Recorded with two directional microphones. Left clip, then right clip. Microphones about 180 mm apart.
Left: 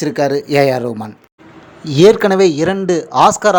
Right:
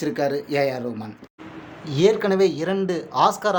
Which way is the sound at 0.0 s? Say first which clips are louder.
Left 8 dB; 40° left (ahead or behind).